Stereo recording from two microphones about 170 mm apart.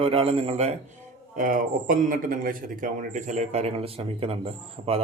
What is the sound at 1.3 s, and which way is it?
A man's voice, 50° right (ahead or behind).